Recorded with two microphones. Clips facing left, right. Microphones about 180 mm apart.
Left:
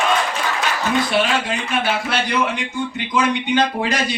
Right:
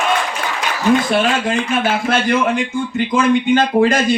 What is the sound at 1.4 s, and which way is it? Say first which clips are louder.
A man's voice: right 4 dB; 50° right (ahead or behind).